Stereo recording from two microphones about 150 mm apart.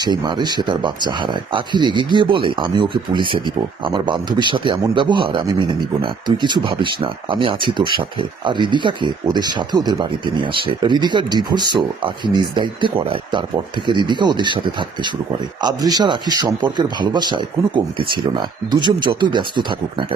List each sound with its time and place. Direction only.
0.0 s a man's voice: 30° right (ahead or behind)